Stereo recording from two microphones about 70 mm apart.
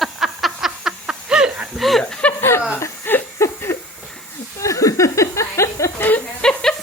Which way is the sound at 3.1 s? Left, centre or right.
Left.